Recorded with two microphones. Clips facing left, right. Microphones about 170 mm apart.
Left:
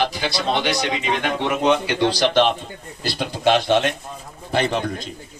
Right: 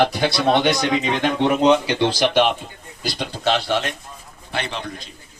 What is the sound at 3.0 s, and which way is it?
Speech, centre (ahead or behind).